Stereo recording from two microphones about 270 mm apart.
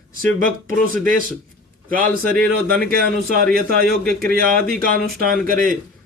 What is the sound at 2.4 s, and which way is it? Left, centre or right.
A man's voice, right.